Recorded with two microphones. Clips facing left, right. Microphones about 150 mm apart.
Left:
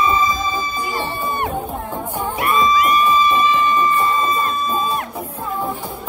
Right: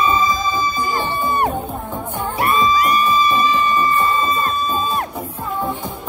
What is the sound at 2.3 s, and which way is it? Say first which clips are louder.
Music: even; 35° right (ahead or behind).